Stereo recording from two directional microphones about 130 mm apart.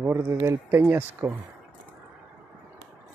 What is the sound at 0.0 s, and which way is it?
Speech, 20° right (ahead or behind).